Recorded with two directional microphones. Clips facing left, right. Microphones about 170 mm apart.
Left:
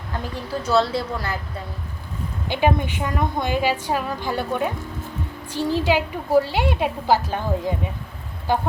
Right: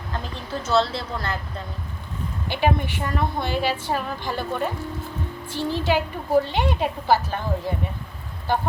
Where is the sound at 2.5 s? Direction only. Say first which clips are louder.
Left 2 dB; 20° left (ahead or behind).